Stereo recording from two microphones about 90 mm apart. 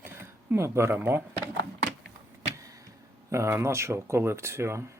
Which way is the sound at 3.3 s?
30° right (ahead or behind).